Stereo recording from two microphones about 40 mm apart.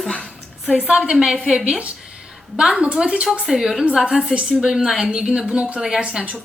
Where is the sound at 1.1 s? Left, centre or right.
Centre.